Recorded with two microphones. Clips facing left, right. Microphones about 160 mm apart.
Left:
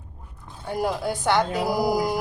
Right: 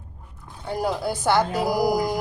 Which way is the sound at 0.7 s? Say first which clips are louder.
Even; centre (ahead or behind).